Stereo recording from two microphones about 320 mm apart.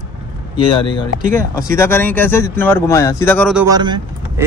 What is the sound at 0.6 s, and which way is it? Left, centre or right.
Speech, centre.